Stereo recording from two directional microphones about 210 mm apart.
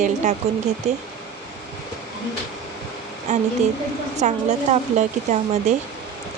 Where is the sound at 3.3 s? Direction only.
35° right (ahead or behind).